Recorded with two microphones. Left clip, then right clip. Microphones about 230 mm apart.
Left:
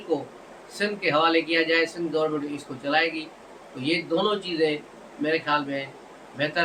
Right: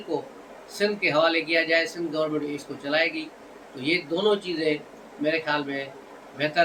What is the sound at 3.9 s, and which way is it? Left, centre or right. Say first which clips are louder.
Speech: right 1 dB; centre.